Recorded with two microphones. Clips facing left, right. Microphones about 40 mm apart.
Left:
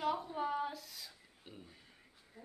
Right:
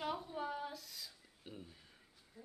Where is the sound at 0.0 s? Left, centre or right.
Centre.